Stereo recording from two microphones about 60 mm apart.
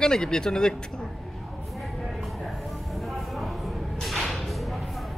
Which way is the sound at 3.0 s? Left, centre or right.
Centre.